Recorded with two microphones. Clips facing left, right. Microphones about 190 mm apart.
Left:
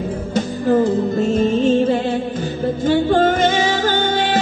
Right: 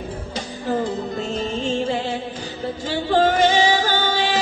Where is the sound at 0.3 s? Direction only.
50° left (ahead or behind).